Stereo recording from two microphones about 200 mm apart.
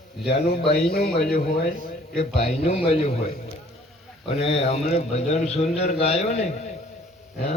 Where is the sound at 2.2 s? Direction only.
30° left (ahead or behind).